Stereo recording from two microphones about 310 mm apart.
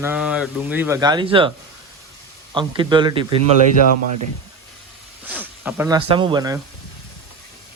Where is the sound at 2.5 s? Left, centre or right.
Centre.